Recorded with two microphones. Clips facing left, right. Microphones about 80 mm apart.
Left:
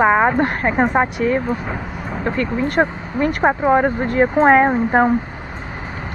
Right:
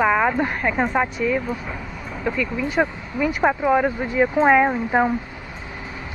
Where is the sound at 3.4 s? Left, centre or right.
Left.